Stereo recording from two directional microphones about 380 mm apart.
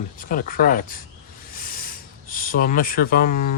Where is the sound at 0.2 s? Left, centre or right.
Left.